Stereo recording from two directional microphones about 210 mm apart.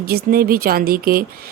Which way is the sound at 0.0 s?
45° right (ahead or behind).